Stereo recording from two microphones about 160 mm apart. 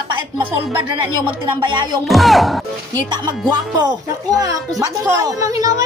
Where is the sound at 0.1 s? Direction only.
30° right (ahead or behind).